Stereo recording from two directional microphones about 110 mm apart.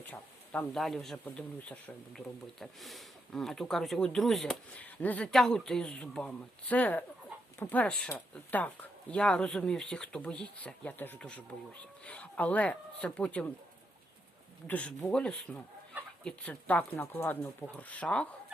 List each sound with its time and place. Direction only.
0.0 s a sound: 15° left (ahead or behind)
0.7 s speech: centre (ahead or behind)
4.8 s speech: 15° left (ahead or behind)
14.7 s speech: 10° left (ahead or behind)